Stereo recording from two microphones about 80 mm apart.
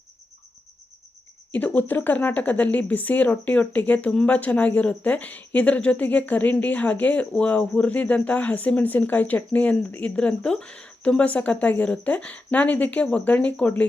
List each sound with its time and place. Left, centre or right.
1.5 s a woman's voice: left